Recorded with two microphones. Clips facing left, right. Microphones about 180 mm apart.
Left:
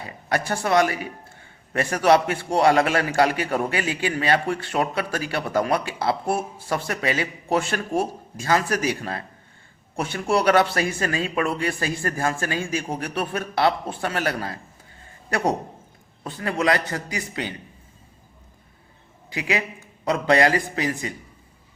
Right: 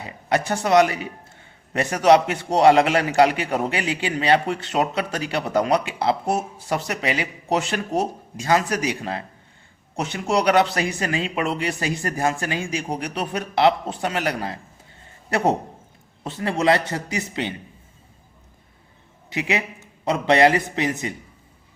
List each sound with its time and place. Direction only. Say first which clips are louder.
0.0 s a man's voice: right 3 dB; 20° right (ahead or behind)
19.3 s a man's voice: right 1 dB; 25° right (ahead or behind)